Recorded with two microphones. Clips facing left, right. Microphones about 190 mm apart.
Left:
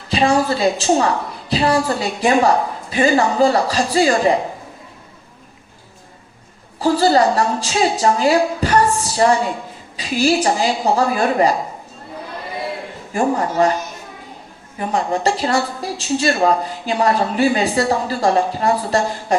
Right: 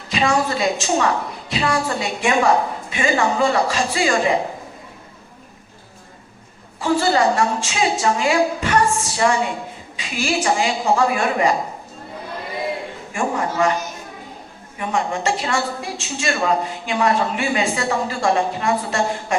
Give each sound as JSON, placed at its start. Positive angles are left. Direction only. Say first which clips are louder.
{"t": 0.1, "sound": "a woman's voice", "louder": "left 3 dB", "side_deg": 35}
{"t": 6.7, "sound": "a woman's voice", "louder": "left 4 dB", "side_deg": 35}
{"t": 13.1, "sound": "a woman's voice", "louder": "left 4 dB", "side_deg": 35}
{"t": 14.8, "sound": "a woman's voice", "louder": "left 3 dB", "side_deg": 35}